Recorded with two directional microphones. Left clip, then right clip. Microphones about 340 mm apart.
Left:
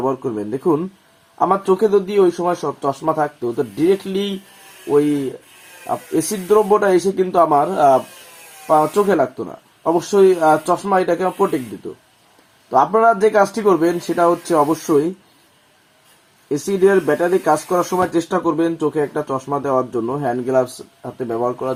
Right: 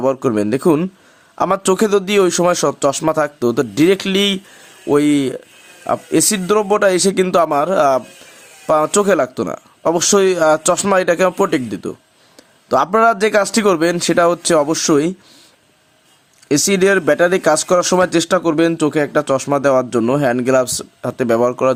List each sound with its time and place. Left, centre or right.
0.0 s speech: right
6.1 s speech: right
12.7 s speech: right
16.5 s speech: right